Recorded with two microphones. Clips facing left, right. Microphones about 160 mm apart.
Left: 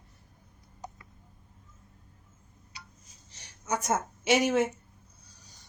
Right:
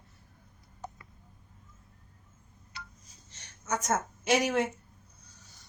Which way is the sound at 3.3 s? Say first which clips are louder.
Left 1 dB; 10° left (ahead or behind).